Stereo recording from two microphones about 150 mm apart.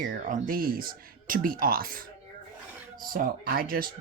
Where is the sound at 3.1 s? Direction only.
70° right (ahead or behind).